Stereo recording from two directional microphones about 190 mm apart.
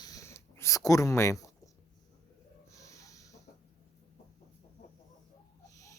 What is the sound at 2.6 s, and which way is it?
Snort, 15° left (ahead or behind).